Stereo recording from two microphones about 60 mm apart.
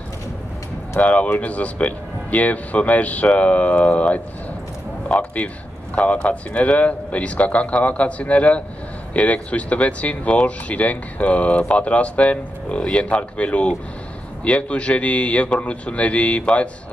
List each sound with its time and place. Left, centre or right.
0.9 s speech: left